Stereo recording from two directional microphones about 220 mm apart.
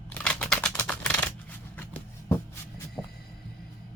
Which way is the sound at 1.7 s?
10° left (ahead or behind).